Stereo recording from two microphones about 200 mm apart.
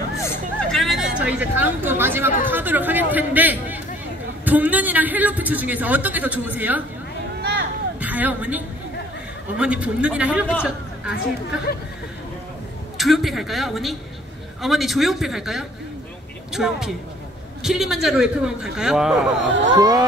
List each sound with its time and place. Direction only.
0.2 s vehicle: 5° left (ahead or behind)
2.4 s a man's voice: 10° right (ahead or behind)
8.0 s a man's voice: 10° right (ahead or behind)
12.9 s a man's voice: centre (ahead or behind)
19.4 s speech: 65° right (ahead or behind)
19.8 s speech: 20° right (ahead or behind)